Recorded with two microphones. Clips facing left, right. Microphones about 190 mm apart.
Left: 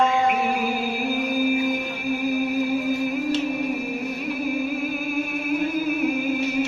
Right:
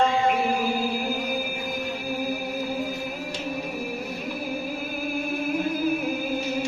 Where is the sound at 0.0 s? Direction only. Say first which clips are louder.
Left 1 dB; 30° right (ahead or behind).